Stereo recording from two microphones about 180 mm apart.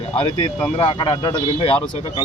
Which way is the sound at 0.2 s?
25° left (ahead or behind).